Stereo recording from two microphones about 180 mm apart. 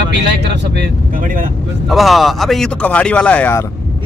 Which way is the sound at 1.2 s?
50° right (ahead or behind).